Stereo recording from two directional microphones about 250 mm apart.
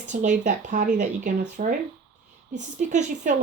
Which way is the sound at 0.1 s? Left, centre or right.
Right.